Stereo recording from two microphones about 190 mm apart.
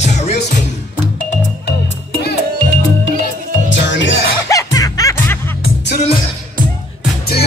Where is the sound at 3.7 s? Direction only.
70° left (ahead or behind).